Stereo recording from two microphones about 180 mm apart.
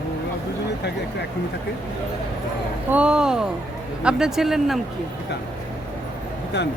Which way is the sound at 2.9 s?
5° right (ahead or behind).